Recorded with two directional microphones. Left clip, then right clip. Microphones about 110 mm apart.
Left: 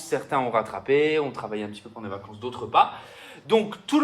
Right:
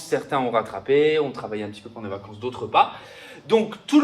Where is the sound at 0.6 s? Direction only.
50° left (ahead or behind).